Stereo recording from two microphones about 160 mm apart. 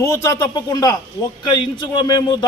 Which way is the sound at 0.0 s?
20° left (ahead or behind).